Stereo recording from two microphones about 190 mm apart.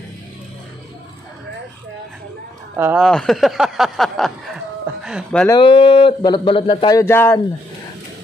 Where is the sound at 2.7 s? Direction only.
10° right (ahead or behind).